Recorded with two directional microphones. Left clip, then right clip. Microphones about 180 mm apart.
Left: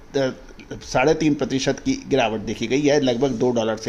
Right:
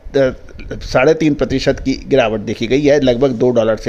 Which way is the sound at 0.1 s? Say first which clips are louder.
Right 9 dB; 40° right (ahead or behind).